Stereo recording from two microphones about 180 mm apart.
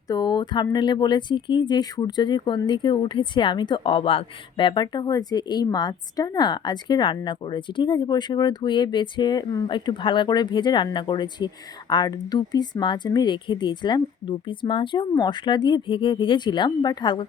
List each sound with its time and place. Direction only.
0.1 s speech: 20° left (ahead or behind)